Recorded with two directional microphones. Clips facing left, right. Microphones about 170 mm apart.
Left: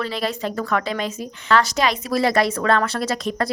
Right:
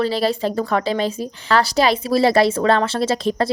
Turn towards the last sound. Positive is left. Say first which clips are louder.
# right 4 dB
turn(degrees=-30)  # may be behind; listen again after turning